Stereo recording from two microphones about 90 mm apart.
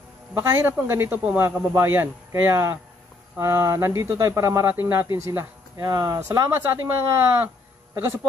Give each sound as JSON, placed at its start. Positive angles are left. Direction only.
{"t": 0.4, "sound": "speech", "side_deg": -30}